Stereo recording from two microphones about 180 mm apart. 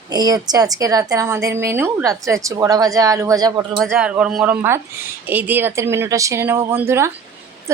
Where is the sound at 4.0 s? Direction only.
5° right (ahead or behind).